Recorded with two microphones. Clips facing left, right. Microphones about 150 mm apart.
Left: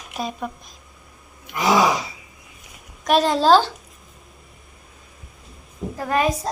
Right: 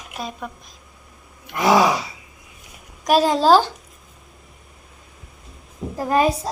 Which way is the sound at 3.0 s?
10° right (ahead or behind).